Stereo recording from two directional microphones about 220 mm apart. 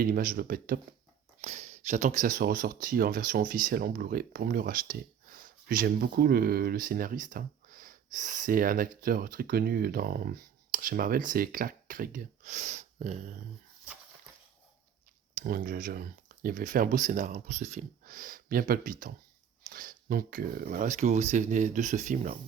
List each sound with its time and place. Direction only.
0.0 s speech: 40° right (ahead or behind)
1.4 s speech: 30° right (ahead or behind)
15.4 s speech: 40° right (ahead or behind)